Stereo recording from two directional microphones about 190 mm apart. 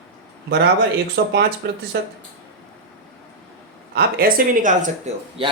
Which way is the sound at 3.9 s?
55° right (ahead or behind).